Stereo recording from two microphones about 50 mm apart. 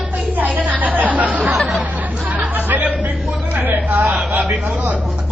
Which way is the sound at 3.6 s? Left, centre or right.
Right.